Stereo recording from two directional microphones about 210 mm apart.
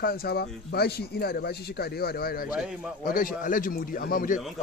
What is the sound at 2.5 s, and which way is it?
Speech, 5° right (ahead or behind).